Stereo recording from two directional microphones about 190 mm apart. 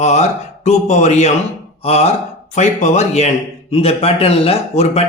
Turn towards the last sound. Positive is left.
turn(degrees=35)  # may be behind; listen again after turning